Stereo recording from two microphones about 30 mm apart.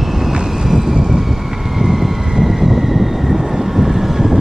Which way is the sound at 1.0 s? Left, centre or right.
Centre.